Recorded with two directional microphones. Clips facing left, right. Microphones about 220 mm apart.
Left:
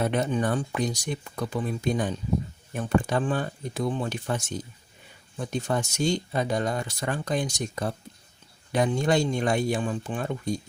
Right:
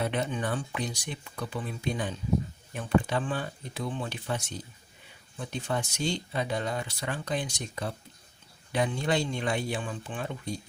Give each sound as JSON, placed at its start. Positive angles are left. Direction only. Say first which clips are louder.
{"t": 0.0, "sound": "speech", "louder": "left 5 dB", "side_deg": 45}